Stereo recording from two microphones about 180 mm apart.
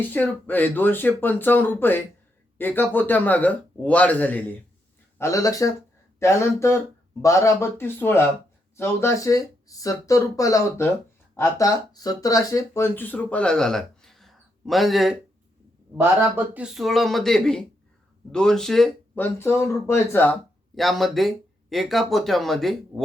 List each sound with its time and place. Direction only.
0.0 s speech: 10° left (ahead or behind)
16.3 s speech: 5° right (ahead or behind); by 20.3 s 10° left (ahead or behind)
20.7 s speech: centre (ahead or behind)